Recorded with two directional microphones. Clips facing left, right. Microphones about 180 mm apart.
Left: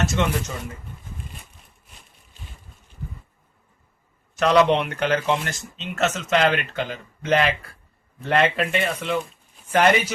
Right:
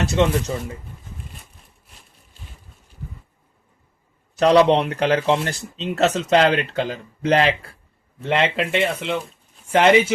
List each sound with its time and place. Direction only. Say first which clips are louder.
0.0 s speech: right 4 dB; 35° right (ahead or behind)
4.4 s speech: right 3 dB; 30° right (ahead or behind)